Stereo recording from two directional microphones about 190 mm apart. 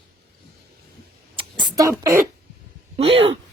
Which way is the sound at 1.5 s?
25° right (ahead or behind).